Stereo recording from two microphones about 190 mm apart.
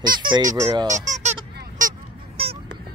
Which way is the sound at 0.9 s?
40° right (ahead or behind).